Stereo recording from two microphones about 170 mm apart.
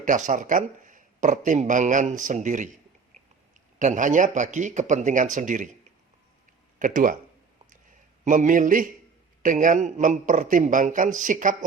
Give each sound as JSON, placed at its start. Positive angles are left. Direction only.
{"t": 0.0, "sound": "speech", "side_deg": -50}
{"t": 3.8, "sound": "speech", "side_deg": -45}
{"t": 6.7, "sound": "speech", "side_deg": -50}
{"t": 8.2, "sound": "speech", "side_deg": -45}